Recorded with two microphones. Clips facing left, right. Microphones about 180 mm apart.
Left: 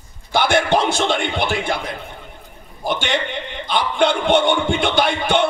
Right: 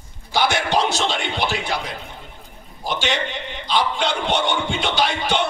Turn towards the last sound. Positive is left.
turn(degrees=55)  # may be behind; listen again after turning